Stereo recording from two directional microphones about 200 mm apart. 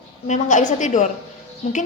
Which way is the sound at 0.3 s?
40° left (ahead or behind).